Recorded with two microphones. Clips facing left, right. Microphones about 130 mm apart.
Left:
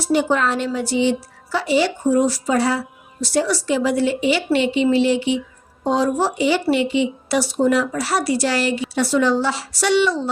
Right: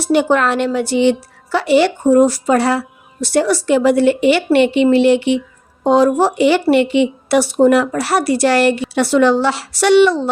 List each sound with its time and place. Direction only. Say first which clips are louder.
0.0 s a woman's voice: right 4 dB; 65° right (ahead or behind)